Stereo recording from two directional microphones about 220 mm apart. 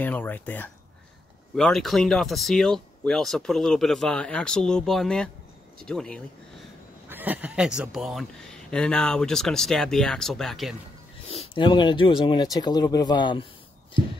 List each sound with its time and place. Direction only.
0.0 s speech: 5° left (ahead or behind)
7.1 s speech: 10° right (ahead or behind)
11.2 s speech: 25° left (ahead or behind)